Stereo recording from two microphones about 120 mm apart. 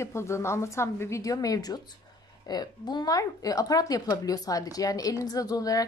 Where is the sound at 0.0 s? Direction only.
25° left (ahead or behind).